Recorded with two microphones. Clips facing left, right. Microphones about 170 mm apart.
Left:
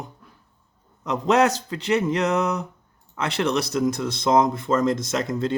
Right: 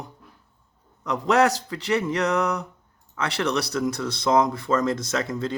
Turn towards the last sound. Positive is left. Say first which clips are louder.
# left 2 dB
turn(degrees=20)  # may be behind; listen again after turning